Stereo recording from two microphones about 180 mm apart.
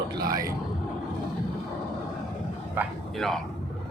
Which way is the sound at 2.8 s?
10° right (ahead or behind).